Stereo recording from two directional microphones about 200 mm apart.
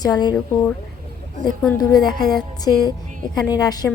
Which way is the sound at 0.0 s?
20° left (ahead or behind).